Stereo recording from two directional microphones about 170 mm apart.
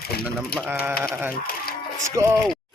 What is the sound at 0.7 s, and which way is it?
Sheep, 10° right (ahead or behind).